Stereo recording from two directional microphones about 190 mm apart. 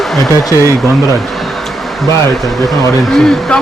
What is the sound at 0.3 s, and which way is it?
Speech, 15° left (ahead or behind).